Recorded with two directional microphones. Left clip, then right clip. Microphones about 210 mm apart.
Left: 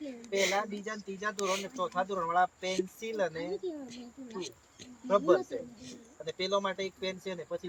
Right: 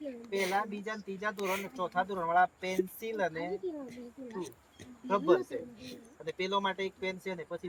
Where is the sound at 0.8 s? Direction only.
20° right (ahead or behind).